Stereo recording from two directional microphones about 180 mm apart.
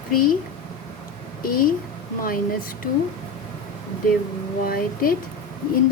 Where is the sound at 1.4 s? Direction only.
50° left (ahead or behind).